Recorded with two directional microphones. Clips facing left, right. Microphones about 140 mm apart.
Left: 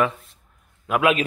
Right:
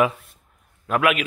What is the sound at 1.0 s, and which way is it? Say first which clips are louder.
Speech: left 1 dB; 30° left (ahead or behind).